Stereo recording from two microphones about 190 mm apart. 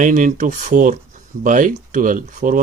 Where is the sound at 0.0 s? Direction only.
45° right (ahead or behind).